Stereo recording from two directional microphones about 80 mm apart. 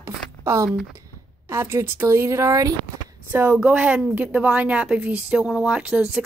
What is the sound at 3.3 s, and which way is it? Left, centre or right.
Speech, right.